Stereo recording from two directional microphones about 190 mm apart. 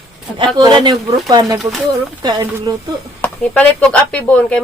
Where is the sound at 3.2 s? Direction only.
5° left (ahead or behind).